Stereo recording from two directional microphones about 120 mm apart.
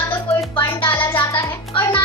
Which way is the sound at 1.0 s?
20° left (ahead or behind).